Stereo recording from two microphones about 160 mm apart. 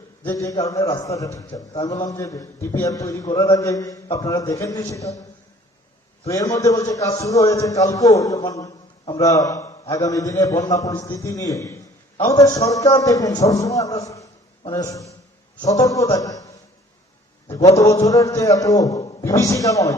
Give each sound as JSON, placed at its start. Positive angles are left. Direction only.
{"t": 0.2, "sound": "a man's voice", "side_deg": 15}
{"t": 6.2, "sound": "a man's voice", "side_deg": 20}
{"t": 17.7, "sound": "a man's voice", "side_deg": 20}